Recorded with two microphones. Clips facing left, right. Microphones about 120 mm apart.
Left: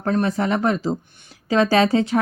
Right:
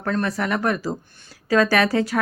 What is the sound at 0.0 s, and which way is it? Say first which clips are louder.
A woman's voice: left 3 dB; 25° left (ahead or behind).